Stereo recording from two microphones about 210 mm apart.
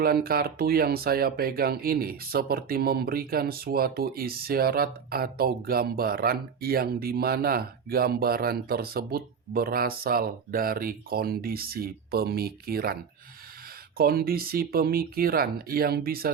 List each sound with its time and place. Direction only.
0.0 s speech: 45° right (ahead or behind)
14.0 s speech: 45° right (ahead or behind)